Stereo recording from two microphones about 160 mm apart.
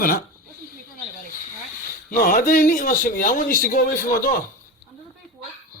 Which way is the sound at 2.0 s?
60° left (ahead or behind).